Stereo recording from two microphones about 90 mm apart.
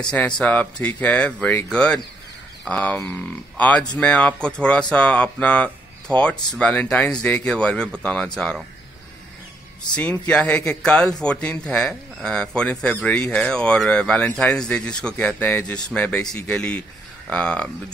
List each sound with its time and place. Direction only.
0.5 s speech: 15° left (ahead or behind)
9.9 s speech: 15° left (ahead or behind)